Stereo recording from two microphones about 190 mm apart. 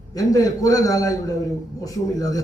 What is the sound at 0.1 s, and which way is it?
A man's voice, 20° left (ahead or behind).